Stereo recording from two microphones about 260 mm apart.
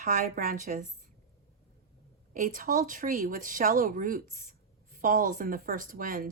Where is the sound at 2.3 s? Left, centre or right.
Right.